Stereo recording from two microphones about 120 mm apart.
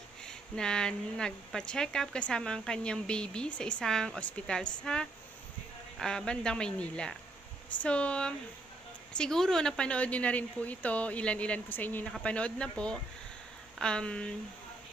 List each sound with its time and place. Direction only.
0.3 s speech: 5° left (ahead or behind)